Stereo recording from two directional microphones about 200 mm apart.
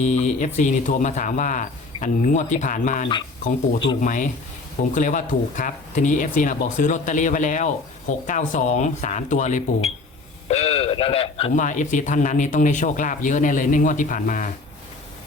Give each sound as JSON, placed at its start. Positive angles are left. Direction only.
{"t": 0.0, "sound": "a man's voice", "side_deg": 35}